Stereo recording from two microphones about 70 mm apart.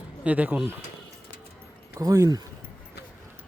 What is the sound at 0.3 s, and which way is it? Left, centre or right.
Speech, right.